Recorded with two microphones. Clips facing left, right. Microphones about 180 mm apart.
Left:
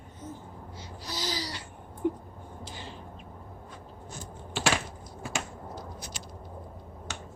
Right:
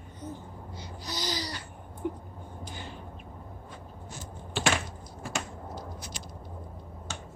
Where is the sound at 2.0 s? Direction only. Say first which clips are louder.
Left 4 dB; 20° left (ahead or behind).